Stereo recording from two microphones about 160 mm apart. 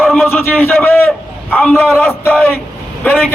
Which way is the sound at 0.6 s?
15° left (ahead or behind).